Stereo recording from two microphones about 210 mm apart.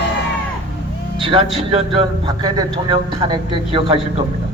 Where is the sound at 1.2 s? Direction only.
25° right (ahead or behind).